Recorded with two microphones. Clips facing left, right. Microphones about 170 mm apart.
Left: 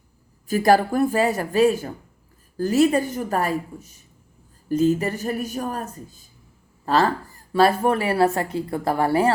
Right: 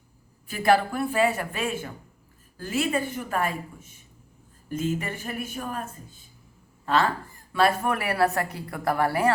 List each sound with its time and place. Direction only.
0.4 s a woman's voice: 40° left (ahead or behind)